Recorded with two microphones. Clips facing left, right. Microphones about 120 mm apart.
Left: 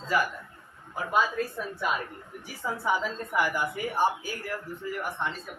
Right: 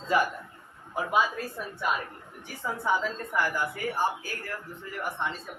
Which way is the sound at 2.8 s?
10° left (ahead or behind).